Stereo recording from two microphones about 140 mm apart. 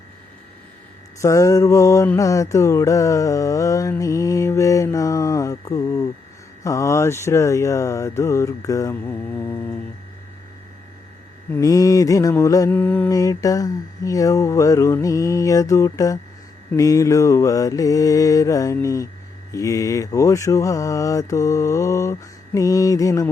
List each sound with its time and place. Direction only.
1.2 s mantra: 20° left (ahead or behind)
11.5 s mantra: 25° left (ahead or behind)
12.7 s mantra: 15° left (ahead or behind)
13.1 s mantra: 25° left (ahead or behind)